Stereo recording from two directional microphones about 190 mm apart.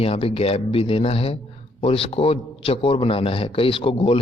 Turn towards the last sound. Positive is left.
turn(degrees=30)  # may be behind; listen again after turning